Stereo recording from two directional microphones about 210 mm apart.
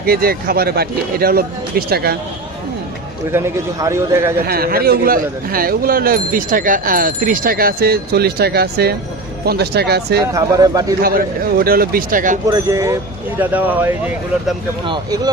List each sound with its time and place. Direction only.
0.0 s speech: 45° right (ahead or behind)
3.3 s speech: 15° right (ahead or behind)
4.4 s speech: 45° right (ahead or behind)
10.3 s speech: 15° right (ahead or behind)
11.0 s speech: 45° right (ahead or behind)
12.5 s speech: 15° right (ahead or behind)
14.8 s speech: 20° right (ahead or behind)